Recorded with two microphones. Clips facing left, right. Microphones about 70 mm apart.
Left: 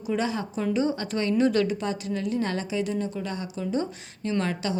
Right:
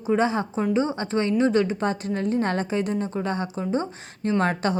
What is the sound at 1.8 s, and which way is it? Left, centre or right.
A woman's voice, right.